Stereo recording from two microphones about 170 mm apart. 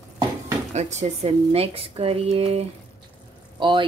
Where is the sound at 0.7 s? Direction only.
40° right (ahead or behind).